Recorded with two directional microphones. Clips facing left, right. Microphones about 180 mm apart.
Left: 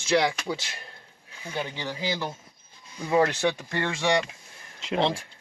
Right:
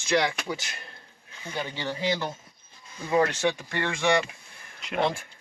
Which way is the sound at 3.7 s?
20° left (ahead or behind).